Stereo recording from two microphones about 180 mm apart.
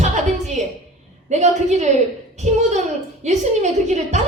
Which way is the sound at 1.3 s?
40° right (ahead or behind).